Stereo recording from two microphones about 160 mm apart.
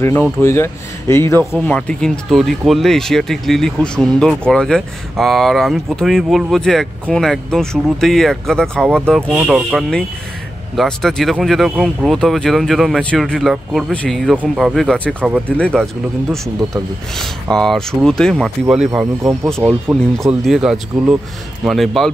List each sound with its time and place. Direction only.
0.0 s speech: 15° left (ahead or behind); by 15.4 s 5° right (ahead or behind)
15.5 s speech: 5° left (ahead or behind)
18.9 s speech: 15° right (ahead or behind)
20.2 s speech: centre (ahead or behind)